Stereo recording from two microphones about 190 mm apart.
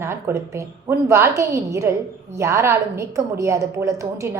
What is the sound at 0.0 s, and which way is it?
A woman's voice, 15° right (ahead or behind).